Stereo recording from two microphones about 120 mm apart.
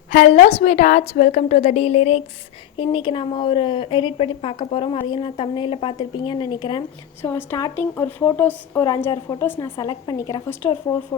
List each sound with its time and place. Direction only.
0.1 s a woman's voice: 90° left
0.4 s a woman's voice: 60° left (ahead or behind)
2.7 s a woman's voice: 45° left (ahead or behind)
7.2 s a woman's voice: 15° left (ahead or behind)
9.7 s a woman's voice: 35° left (ahead or behind)
10.5 s a woman's voice: 20° left (ahead or behind)